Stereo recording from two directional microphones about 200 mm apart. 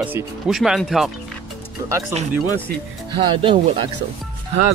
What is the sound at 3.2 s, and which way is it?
Speech, 25° right (ahead or behind).